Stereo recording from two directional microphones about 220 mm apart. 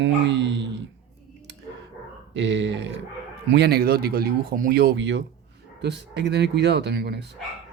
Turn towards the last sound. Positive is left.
turn(degrees=-50)  # may be behind; listen again after turning